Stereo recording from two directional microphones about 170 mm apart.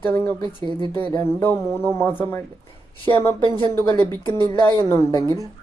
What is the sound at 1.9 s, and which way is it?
Speech, 15° left (ahead or behind).